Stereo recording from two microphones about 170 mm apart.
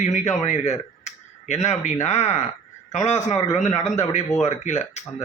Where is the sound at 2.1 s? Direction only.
40° left (ahead or behind).